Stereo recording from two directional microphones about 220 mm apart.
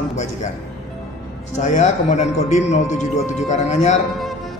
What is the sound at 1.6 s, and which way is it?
Speech, 30° left (ahead or behind).